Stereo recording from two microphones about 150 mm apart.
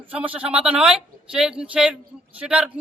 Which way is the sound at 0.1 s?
10° right (ahead or behind).